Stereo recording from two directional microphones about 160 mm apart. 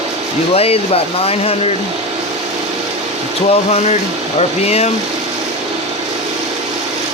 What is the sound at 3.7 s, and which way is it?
Speech, 40° left (ahead or behind).